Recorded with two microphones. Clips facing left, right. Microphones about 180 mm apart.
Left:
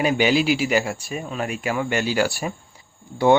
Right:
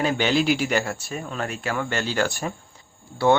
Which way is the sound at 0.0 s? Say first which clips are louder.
Left 2 dB; 10° left (ahead or behind).